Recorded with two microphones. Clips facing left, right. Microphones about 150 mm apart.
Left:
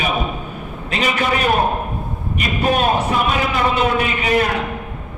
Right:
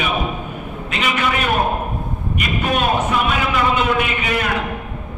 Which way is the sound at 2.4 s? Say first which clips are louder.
Left 2 dB; 35° left (ahead or behind).